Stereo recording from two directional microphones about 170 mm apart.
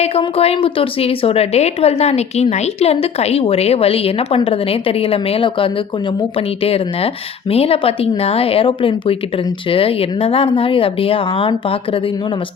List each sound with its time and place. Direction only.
0.0 s a woman's voice: 35° left (ahead or behind)